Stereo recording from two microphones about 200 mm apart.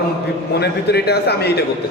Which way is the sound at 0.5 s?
55° left (ahead or behind).